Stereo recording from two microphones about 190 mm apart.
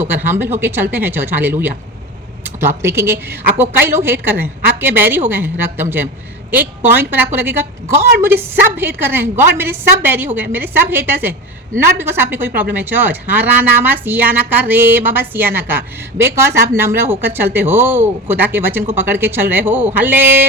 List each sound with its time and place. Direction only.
0.0 s speech: 10° right (ahead or behind)